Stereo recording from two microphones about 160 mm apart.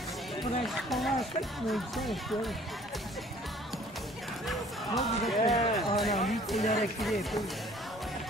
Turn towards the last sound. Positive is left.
turn(degrees=0)  # may be behind; listen again after turning